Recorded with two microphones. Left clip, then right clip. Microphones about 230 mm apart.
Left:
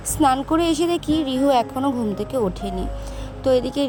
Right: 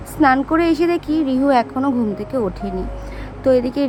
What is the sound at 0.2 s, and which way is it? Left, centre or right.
A woman's voice, left.